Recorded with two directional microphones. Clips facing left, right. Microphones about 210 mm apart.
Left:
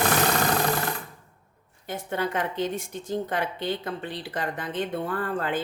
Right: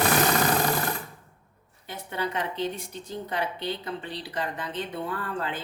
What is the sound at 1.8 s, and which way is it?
A woman's voice, 50° left (ahead or behind).